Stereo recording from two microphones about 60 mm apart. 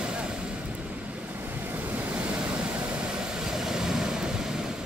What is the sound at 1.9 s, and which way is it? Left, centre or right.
Vehicle, centre.